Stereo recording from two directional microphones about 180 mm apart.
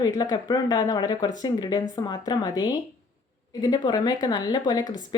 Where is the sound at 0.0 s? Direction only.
20° left (ahead or behind).